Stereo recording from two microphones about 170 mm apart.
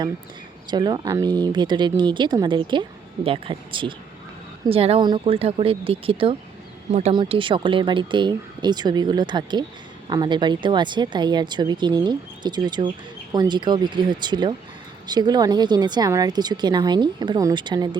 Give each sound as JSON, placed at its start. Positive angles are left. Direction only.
{"t": 0.7, "sound": "speech", "side_deg": -25}